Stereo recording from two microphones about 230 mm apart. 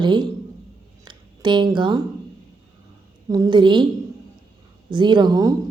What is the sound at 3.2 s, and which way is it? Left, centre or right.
Speech, centre.